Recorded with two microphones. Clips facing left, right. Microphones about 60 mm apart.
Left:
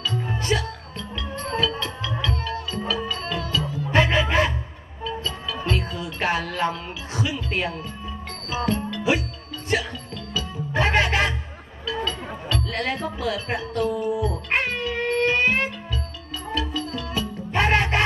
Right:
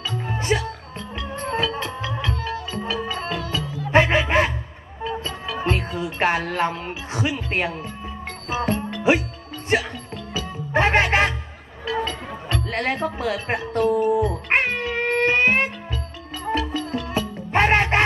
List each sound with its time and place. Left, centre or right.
0.0 s music: right
11.8 s a sound: right
12.4 s music: right